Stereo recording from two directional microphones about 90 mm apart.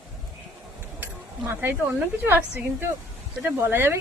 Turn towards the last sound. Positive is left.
turn(degrees=-25)  # may be behind; listen again after turning